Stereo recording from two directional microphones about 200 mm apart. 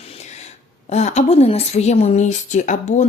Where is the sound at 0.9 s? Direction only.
35° left (ahead or behind).